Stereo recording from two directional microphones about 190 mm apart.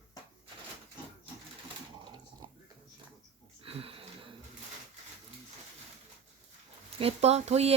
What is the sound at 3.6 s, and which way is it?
Wheeze, 30° right (ahead or behind).